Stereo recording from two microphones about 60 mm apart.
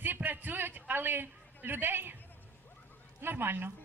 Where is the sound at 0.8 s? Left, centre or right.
Right.